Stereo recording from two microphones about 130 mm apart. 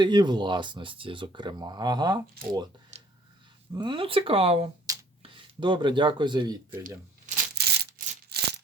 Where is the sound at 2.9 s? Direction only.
55° right (ahead or behind).